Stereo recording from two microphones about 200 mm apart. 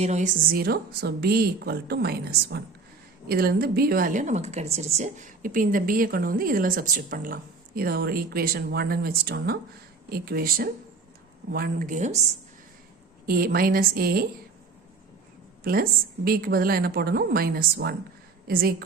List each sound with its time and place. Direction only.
0.0 s a woman's voice: 35° right (ahead or behind)
13.2 s a woman's voice: 45° right (ahead or behind)
15.6 s a woman's voice: 50° right (ahead or behind)